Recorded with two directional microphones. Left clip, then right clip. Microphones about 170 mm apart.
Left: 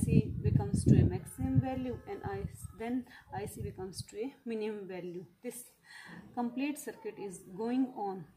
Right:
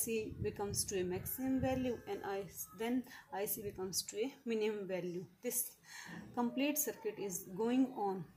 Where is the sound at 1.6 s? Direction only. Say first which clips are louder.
Right 1 dB; 15° left (ahead or behind).